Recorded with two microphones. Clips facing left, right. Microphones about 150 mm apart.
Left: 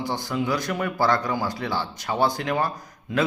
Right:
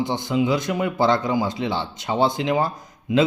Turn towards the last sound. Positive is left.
turn(degrees=-15)  # may be behind; listen again after turning